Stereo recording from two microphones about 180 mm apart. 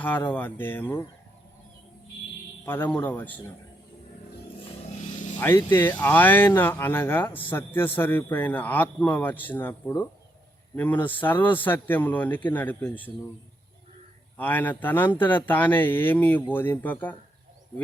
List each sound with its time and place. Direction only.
0.0 s a man's voice: 10° left (ahead or behind)
2.6 s a man's voice: 10° left (ahead or behind)
4.5 s vehicle: 40° left (ahead or behind)
5.4 s a man's voice: 10° left (ahead or behind)
14.3 s a man's voice: 10° left (ahead or behind)